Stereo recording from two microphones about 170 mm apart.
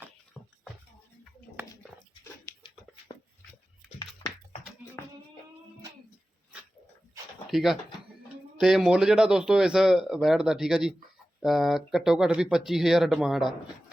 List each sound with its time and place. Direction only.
0.4 s music: 5° left (ahead or behind)
3.1 s a sound: 30° left (ahead or behind)
7.5 s speech: centre (ahead or behind)